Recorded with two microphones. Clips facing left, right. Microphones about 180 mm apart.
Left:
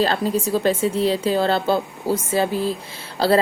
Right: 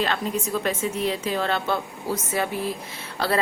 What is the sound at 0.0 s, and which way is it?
Speech, 35° left (ahead or behind).